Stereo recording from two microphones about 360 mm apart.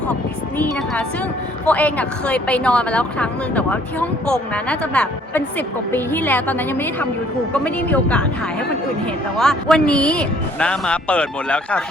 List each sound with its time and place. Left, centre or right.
1.6 s a woman's voice: centre
9.4 s a woman's voice: centre